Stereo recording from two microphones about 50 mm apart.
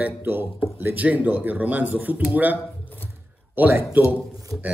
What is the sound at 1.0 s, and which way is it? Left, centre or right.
A man's voice, right.